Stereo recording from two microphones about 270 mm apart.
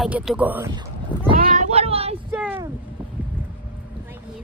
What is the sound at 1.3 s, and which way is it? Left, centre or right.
Child singing, right.